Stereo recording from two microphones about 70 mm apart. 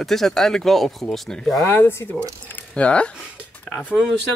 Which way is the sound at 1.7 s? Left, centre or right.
Left.